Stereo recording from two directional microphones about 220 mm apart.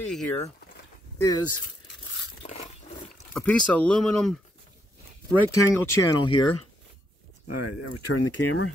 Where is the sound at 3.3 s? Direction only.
5° left (ahead or behind).